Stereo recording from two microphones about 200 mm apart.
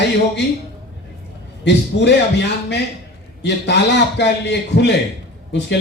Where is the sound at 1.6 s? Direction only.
60° left (ahead or behind).